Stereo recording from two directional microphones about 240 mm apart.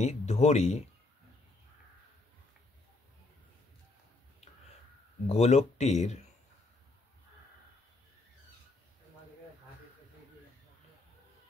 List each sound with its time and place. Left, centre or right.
0.0 s speech: left
5.2 s speech: left